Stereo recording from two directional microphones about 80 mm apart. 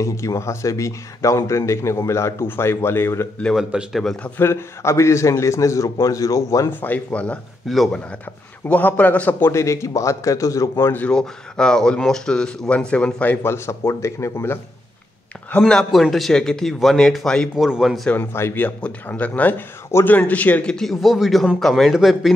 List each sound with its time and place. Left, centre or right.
0.0 s speech: left
3.5 s a man's voice: centre
4.4 s speech: left
6.7 s a man's voice: left
7.6 s a man's voice: centre
8.6 s a man's voice: centre
9.5 s speech: left
11.1 s speech: centre
13.5 s speech: left
15.6 s a man's voice: centre
17.6 s a man's voice: centre
18.1 s a man's voice: left
18.8 s a man's voice: centre
20.7 s a man's voice: centre